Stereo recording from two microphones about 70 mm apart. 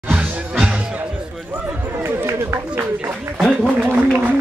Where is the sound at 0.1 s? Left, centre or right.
Centre.